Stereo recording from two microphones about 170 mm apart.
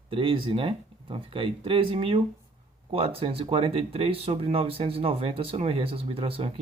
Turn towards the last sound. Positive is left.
turn(degrees=-35)  # may be behind; listen again after turning